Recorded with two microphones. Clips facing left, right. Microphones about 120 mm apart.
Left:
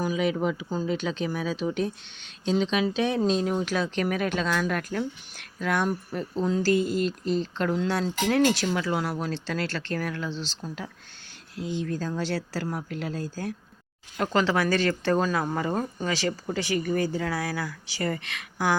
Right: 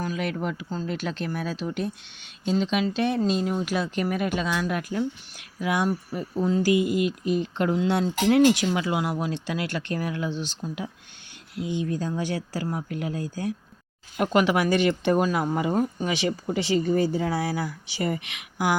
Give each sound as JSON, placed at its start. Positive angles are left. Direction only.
{"t": 0.0, "sound": "speech", "side_deg": 0}
{"t": 11.6, "sound": "speech", "side_deg": -15}
{"t": 16.0, "sound": "speech", "side_deg": -20}